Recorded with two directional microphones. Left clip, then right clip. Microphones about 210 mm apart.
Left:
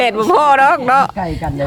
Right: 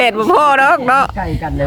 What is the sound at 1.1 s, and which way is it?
Speech, 15° left (ahead or behind).